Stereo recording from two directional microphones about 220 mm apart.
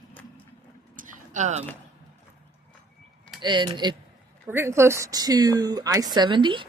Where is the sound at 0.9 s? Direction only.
35° right (ahead or behind).